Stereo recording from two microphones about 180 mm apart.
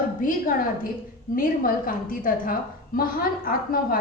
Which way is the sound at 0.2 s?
50° left (ahead or behind).